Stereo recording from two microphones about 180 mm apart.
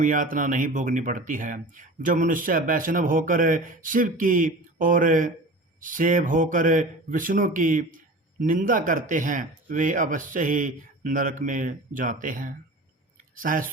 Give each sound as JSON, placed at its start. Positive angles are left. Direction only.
{"t": 0.0, "sound": "speech", "side_deg": -45}